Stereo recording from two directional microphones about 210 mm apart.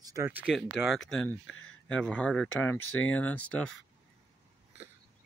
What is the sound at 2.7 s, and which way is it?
Speech, 80° left.